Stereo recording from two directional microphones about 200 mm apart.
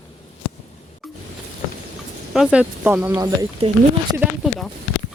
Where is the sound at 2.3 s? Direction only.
5° right (ahead or behind).